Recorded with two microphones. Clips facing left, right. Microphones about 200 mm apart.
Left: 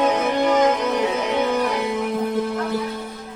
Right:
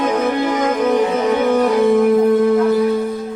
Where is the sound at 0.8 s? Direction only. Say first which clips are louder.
Right 6 dB; 55° right (ahead or behind).